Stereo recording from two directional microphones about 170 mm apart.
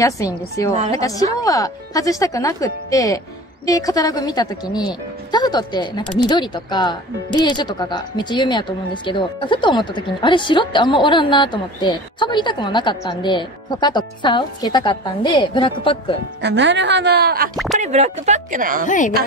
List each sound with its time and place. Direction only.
0.2 s a woman's voice: 20° left (ahead or behind)
16.3 s speech: 90° right; by 17.5 s 65° right (ahead or behind)
17.7 s speech: 40° right (ahead or behind)
18.9 s speech: 50° left (ahead or behind)